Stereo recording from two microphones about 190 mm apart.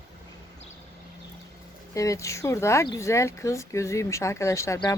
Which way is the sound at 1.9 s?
15° left (ahead or behind).